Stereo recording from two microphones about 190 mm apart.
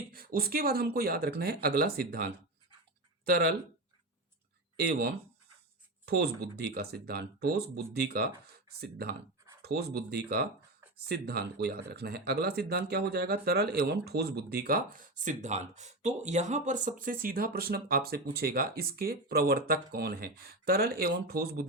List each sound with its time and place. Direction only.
0.1 s speech: 50° right (ahead or behind)
4.9 s speech: 60° right (ahead or behind)